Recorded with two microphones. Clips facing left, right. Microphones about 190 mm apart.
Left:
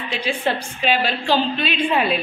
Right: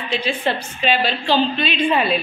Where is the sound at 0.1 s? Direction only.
10° left (ahead or behind).